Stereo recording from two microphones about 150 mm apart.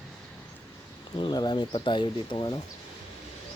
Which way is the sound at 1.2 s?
30° left (ahead or behind).